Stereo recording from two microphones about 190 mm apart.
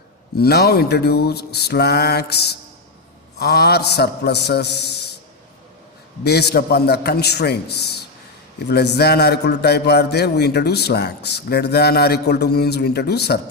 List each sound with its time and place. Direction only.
0.3 s a man's voice: 55° left (ahead or behind)
6.2 s a man's voice: 60° left (ahead or behind)